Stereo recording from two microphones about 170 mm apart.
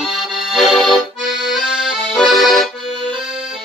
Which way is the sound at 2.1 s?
Centre (ahead or behind).